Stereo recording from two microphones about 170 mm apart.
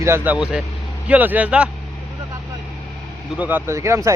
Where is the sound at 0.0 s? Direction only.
15° right (ahead or behind).